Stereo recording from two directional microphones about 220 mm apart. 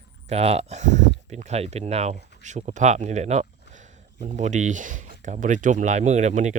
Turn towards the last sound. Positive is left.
turn(degrees=-35)  # may be behind; listen again after turning